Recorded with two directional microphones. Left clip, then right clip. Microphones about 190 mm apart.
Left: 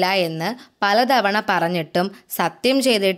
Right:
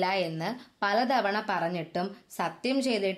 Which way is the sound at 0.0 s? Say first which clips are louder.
Left 9 dB; 40° left (ahead or behind).